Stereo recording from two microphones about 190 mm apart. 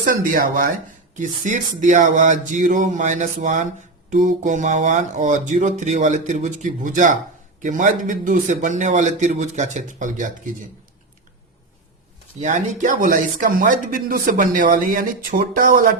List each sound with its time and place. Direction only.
0.0 s speech: 45° right (ahead or behind)
12.4 s speech: 40° right (ahead or behind)